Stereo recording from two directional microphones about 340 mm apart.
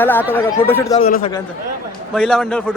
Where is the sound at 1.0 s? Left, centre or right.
Centre.